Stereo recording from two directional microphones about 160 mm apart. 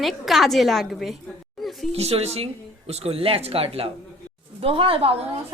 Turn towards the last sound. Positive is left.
turn(degrees=-35)  # may be behind; listen again after turning